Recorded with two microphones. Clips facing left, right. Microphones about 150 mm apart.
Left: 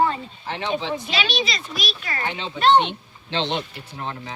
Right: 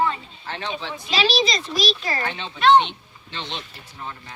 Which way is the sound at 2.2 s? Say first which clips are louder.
Left 1 dB; 20° left (ahead or behind).